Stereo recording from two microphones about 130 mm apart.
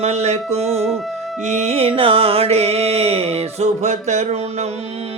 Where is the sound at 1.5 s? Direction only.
60° right (ahead or behind).